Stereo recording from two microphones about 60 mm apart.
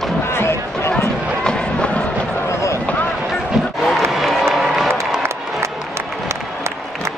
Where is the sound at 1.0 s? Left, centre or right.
Centre.